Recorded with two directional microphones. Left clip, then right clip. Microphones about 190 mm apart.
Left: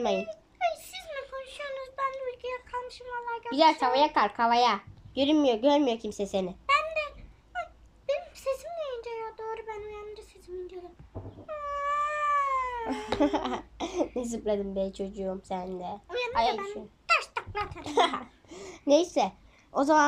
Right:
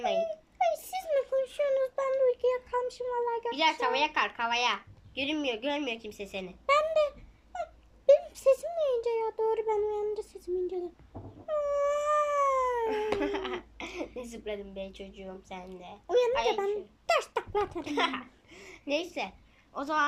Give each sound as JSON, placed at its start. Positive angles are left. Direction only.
{"t": 0.2, "sound": "a sound", "side_deg": -35}
{"t": 3.5, "sound": "a woman's voice", "side_deg": 30}
{"t": 6.7, "sound": "a sound", "side_deg": -30}
{"t": 9.5, "sound": "a child's voice", "side_deg": -30}
{"t": 11.4, "sound": "cat", "side_deg": -35}
{"t": 13.1, "sound": "a woman's voice", "side_deg": 30}
{"t": 16.0, "sound": "a child's voice", "side_deg": -35}
{"t": 17.1, "sound": "a sound", "side_deg": -35}
{"t": 17.8, "sound": "a child's voice", "side_deg": 30}